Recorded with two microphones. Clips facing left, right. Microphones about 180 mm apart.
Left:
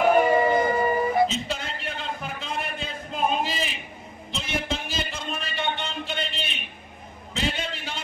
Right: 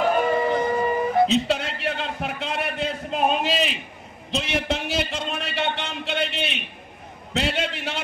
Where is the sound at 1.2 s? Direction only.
70° right (ahead or behind).